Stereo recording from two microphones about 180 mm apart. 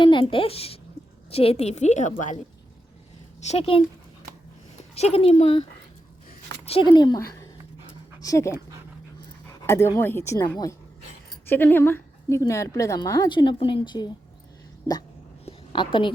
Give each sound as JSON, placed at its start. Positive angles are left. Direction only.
{"t": 0.0, "sound": "a child's voice", "side_deg": 25}
{"t": 3.4, "sound": "a woman's voice", "side_deg": 35}
{"t": 4.9, "sound": "a woman's voice", "side_deg": 35}
{"t": 6.7, "sound": "a woman's voice", "side_deg": 30}
{"t": 15.4, "sound": "a sound", "side_deg": 25}